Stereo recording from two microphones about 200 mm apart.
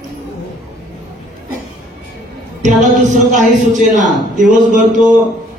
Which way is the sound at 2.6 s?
35° right (ahead or behind).